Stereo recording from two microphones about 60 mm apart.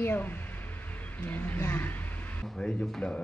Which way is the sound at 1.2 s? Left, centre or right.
Left.